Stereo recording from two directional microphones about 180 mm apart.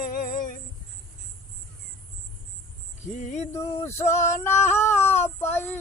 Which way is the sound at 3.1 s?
40° left (ahead or behind).